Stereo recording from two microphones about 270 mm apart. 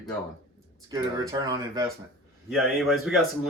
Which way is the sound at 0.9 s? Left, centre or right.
Centre.